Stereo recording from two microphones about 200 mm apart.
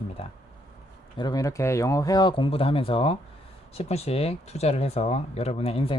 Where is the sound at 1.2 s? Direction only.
20° left (ahead or behind).